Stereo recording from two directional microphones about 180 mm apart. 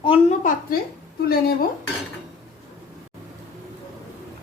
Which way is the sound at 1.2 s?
55° left (ahead or behind).